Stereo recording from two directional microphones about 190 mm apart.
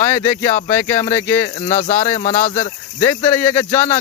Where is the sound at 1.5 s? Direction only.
40° left (ahead or behind).